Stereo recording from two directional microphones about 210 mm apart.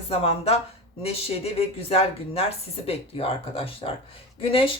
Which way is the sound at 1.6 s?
30° left (ahead or behind).